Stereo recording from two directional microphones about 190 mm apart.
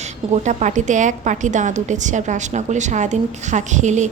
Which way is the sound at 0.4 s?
40° right (ahead or behind).